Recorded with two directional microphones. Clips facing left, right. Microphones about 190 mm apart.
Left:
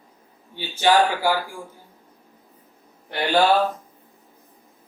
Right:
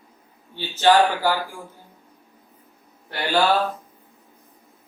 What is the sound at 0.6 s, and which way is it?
Speech, 10° left (ahead or behind).